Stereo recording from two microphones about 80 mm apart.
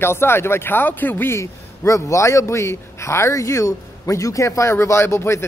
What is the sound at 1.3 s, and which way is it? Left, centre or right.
A man's voice, left.